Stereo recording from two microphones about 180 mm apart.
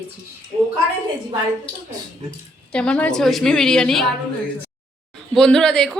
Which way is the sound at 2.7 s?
5° left (ahead or behind).